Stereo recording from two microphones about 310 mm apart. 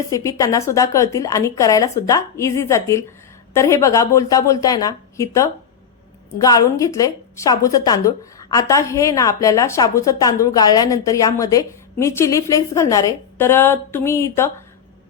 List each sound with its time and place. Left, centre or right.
0.1 s a woman's voice: centre